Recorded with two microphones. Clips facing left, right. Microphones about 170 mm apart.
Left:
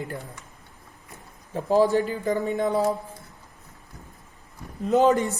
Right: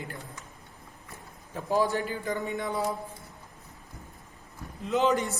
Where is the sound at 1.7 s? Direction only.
35° left (ahead or behind).